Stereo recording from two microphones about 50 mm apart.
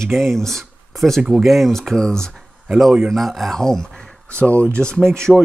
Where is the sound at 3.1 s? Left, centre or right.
Centre.